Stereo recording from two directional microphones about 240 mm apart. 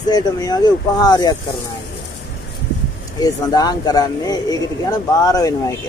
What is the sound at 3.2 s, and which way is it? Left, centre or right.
Speech, centre.